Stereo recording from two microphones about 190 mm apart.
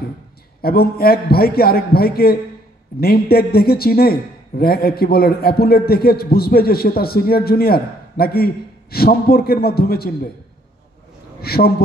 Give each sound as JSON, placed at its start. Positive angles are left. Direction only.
{"t": 0.6, "sound": "a man's voice", "side_deg": 55}
{"t": 11.4, "sound": "a man's voice", "side_deg": 55}